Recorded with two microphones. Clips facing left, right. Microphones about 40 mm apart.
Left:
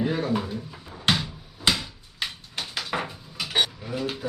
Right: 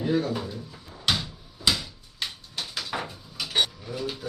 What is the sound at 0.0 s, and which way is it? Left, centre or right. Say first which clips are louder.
Speech: left 1 dB; left.